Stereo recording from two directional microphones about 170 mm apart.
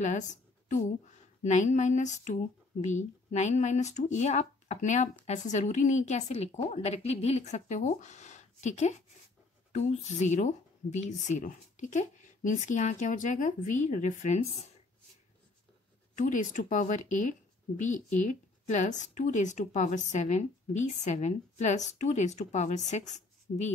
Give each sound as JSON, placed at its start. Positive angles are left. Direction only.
{"t": 0.0, "sound": "a woman's voice", "side_deg": 45}
{"t": 16.2, "sound": "speech", "side_deg": 50}